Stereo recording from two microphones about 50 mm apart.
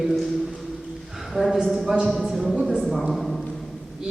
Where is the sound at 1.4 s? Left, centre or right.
Centre.